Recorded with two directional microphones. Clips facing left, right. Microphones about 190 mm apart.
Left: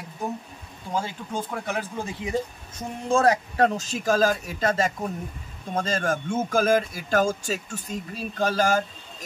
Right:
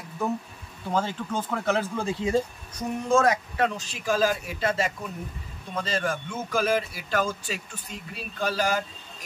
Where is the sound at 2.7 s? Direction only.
35° left (ahead or behind).